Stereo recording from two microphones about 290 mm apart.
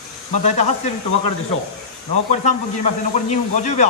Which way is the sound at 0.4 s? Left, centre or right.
Left.